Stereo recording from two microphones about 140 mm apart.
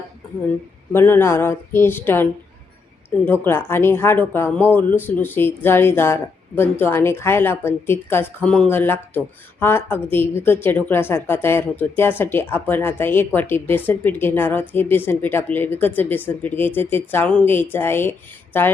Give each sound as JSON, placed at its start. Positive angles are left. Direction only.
{"t": 0.9, "sound": "a woman's voice", "side_deg": 15}
{"t": 3.2, "sound": "a woman's voice", "side_deg": 15}